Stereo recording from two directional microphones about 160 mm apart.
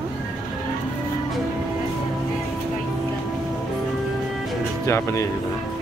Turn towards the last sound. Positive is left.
turn(degrees=20)  # may be behind; listen again after turning